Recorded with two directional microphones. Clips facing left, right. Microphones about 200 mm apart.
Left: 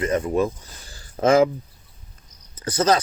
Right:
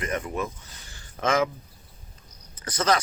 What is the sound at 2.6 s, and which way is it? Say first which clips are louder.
Speech: left 5 dB; 30° left (ahead or behind).